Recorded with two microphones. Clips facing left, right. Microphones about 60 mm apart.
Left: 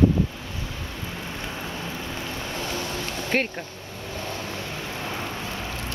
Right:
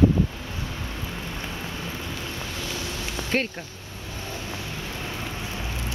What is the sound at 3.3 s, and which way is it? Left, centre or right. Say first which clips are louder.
Speech: left 1 dB; centre.